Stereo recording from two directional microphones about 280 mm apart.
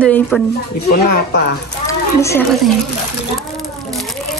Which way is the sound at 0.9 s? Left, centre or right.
Left.